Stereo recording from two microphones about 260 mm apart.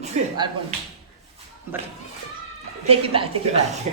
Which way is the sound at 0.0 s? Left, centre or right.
Right.